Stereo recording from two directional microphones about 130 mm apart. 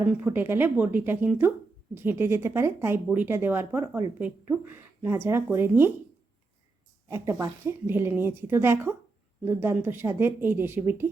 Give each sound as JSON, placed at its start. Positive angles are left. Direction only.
{"t": 0.3, "sound": "speech", "side_deg": -15}
{"t": 7.1, "sound": "speech", "side_deg": -20}